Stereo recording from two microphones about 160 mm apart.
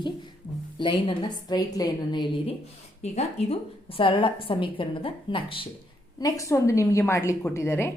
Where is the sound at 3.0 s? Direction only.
45° left (ahead or behind).